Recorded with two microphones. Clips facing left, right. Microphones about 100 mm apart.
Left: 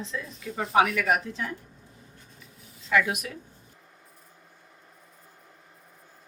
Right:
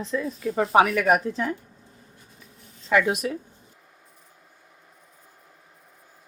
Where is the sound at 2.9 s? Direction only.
35° right (ahead or behind).